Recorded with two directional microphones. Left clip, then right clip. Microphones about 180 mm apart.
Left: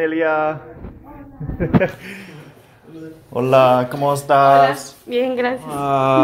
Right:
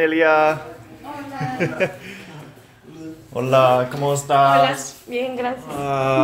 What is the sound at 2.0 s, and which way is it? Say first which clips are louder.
Speech: left 2 dB; 40° left (ahead or behind).